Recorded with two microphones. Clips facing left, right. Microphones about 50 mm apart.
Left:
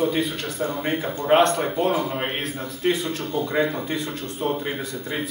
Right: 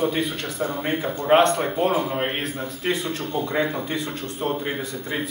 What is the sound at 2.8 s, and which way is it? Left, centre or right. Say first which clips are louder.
Speech: left 3 dB; right.